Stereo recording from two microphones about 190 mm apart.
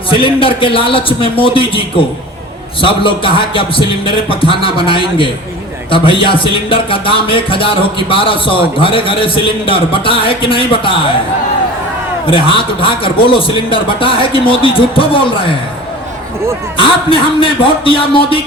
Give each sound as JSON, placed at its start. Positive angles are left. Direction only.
{"t": 0.2, "sound": "speech", "side_deg": 25}
{"t": 12.2, "sound": "speech", "side_deg": 30}
{"t": 17.1, "sound": "speech", "side_deg": 25}